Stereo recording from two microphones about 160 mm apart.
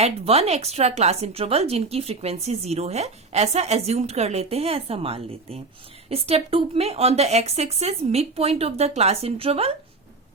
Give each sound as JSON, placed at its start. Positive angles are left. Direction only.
{"t": 0.0, "sound": "a woman's voice", "side_deg": -40}